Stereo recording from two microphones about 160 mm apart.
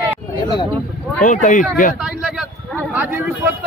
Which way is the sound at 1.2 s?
55° left (ahead or behind).